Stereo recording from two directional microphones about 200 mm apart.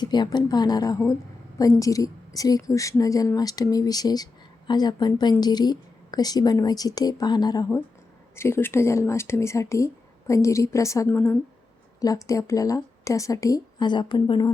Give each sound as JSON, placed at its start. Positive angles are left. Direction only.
{"t": 0.0, "sound": "a woman's voice", "side_deg": 20}